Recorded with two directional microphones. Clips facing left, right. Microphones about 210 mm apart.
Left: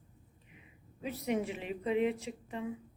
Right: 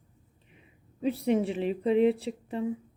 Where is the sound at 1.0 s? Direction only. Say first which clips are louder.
Right 8 dB; 30° right (ahead or behind).